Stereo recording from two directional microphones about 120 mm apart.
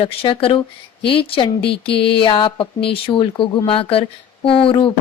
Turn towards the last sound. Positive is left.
turn(degrees=45)  # may be behind; listen again after turning